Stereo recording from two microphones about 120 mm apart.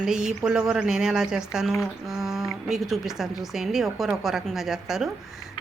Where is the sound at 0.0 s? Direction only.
5° right (ahead or behind).